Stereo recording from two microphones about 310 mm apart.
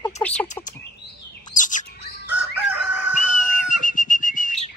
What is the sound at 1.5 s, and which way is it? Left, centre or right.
Chirp, left.